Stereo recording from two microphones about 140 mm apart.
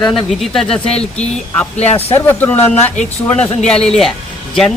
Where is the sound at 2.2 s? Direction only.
15° left (ahead or behind).